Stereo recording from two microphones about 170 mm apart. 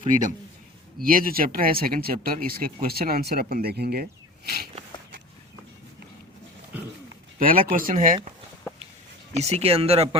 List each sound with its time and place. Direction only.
0.1 s speech: 50° right (ahead or behind); by 4.0 s 65° right (ahead or behind)
4.4 s a sound: 70° right (ahead or behind)
7.3 s speech: 55° right (ahead or behind)
9.3 s speech: 40° right (ahead or behind)